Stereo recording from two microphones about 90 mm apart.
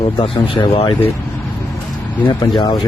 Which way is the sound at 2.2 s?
45° left (ahead or behind).